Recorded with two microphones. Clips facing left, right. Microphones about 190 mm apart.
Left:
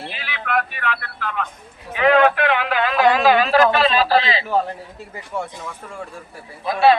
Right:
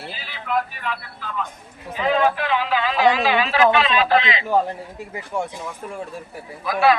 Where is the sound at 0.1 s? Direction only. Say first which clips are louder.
Left 1 dB; 70° left (ahead or behind).